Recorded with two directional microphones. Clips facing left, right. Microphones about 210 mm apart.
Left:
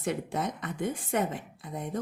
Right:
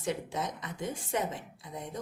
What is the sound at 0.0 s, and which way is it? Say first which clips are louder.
Speech: left 3 dB; 55° left (ahead or behind).